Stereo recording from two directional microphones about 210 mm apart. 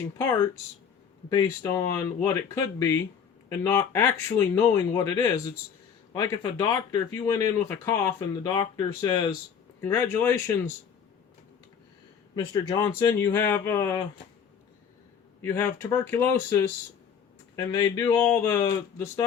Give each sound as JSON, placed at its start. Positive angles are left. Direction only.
{"t": 0.2, "sound": "speech", "side_deg": 10}
{"t": 13.0, "sound": "speech", "side_deg": 20}
{"t": 15.4, "sound": "speech", "side_deg": 10}